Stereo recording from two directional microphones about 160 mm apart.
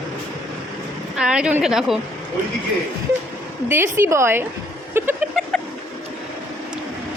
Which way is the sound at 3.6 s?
15° right (ahead or behind).